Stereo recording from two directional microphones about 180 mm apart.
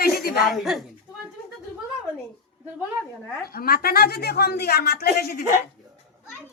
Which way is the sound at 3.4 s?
55° left (ahead or behind).